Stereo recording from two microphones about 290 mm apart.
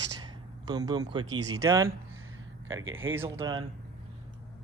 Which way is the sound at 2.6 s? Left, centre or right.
Right.